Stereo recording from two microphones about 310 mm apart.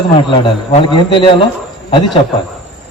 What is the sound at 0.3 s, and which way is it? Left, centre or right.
A man's voice, centre.